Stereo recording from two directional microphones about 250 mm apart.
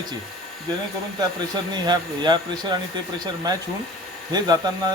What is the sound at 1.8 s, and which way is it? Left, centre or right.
Speech, centre.